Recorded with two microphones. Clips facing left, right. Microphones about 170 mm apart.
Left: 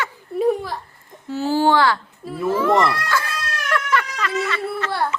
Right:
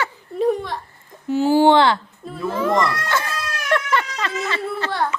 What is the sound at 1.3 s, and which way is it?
Speech, 15° right (ahead or behind).